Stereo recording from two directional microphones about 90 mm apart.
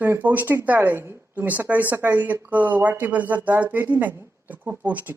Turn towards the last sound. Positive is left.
turn(degrees=-20)  # may be behind; listen again after turning